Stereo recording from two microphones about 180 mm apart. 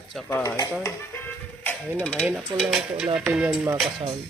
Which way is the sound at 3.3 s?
5° right (ahead or behind).